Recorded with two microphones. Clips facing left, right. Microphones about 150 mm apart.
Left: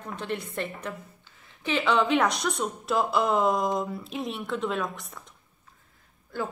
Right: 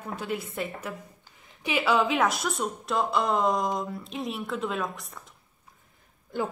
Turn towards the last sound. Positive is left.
turn(degrees=-15)  # may be behind; listen again after turning